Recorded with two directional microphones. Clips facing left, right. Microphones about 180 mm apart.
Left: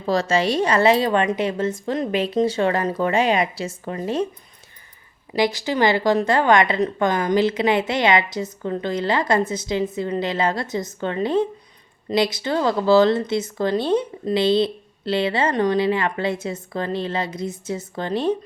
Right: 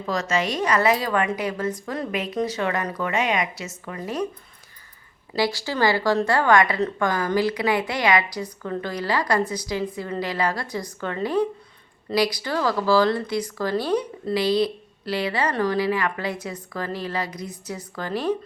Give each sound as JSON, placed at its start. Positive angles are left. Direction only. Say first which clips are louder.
{"t": 0.0, "sound": "speech", "louder": "left 5 dB", "side_deg": 30}
{"t": 5.3, "sound": "speech", "louder": "left 3 dB", "side_deg": 20}